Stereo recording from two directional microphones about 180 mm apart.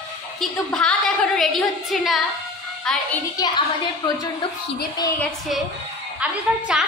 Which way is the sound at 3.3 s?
25° left (ahead or behind).